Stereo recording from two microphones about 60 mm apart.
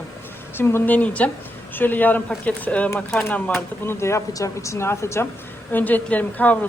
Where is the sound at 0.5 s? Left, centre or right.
Left.